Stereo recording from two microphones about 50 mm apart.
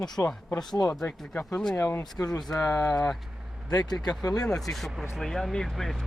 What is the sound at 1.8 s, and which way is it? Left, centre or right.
Speech, left.